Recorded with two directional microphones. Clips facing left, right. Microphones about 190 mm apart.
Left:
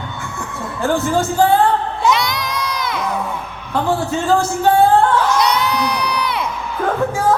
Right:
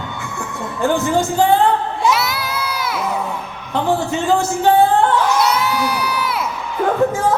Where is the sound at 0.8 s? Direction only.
15° right (ahead or behind).